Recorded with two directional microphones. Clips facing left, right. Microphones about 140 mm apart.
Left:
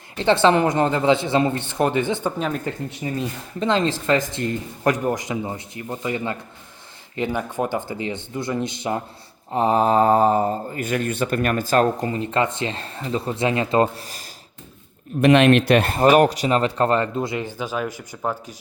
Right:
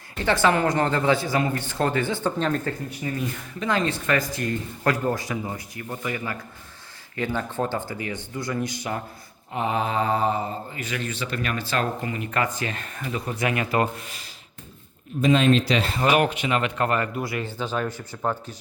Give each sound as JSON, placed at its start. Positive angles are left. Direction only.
{"t": 0.2, "sound": "speech", "side_deg": 25}
{"t": 9.5, "sound": "speech", "side_deg": 35}
{"t": 15.2, "sound": "speech", "side_deg": 70}